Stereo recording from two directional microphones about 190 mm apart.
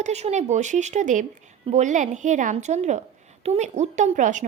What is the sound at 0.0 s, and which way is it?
Speech, 35° right (ahead or behind).